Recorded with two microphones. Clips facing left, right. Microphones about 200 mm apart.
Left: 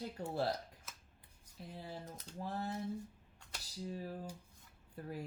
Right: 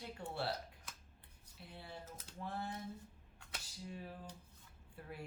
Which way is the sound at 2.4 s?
40° left (ahead or behind).